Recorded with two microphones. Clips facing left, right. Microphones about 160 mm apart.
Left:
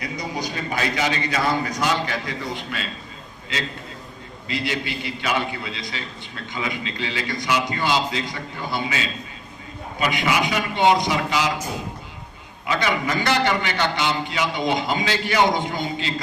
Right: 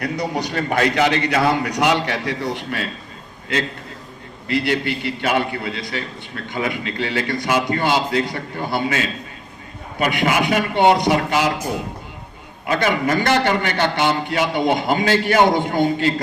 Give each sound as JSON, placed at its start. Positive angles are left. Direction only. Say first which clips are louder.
{"t": 0.0, "sound": "a man's voice", "louder": "right 6 dB", "side_deg": -65}